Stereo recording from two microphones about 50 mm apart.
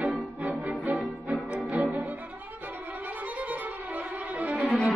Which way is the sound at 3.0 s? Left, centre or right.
Right.